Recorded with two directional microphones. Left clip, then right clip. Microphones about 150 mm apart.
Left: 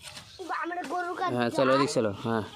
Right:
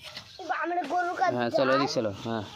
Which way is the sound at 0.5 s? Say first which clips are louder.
Right 4 dB; 70° left (ahead or behind).